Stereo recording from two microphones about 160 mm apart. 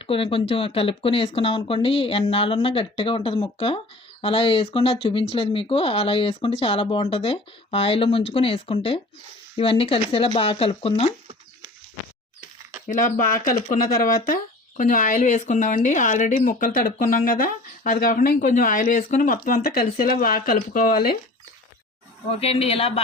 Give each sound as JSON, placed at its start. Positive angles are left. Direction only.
{"t": 0.0, "sound": "speech", "side_deg": 35}
{"t": 12.9, "sound": "speech", "side_deg": 55}
{"t": 14.8, "sound": "speech", "side_deg": 55}
{"t": 22.4, "sound": "speech", "side_deg": 40}